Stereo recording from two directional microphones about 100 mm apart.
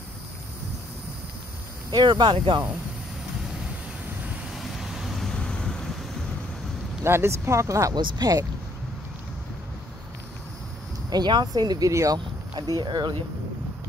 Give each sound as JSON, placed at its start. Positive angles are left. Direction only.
{"t": 1.9, "sound": "speech", "side_deg": -50}
{"t": 4.5, "sound": "vehicle", "side_deg": -5}
{"t": 7.0, "sound": "speech", "side_deg": -25}
{"t": 11.1, "sound": "speech", "side_deg": -45}
{"t": 12.5, "sound": "speech", "side_deg": -45}